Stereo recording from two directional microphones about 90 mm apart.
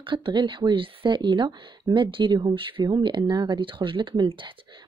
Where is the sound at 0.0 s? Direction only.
65° right (ahead or behind).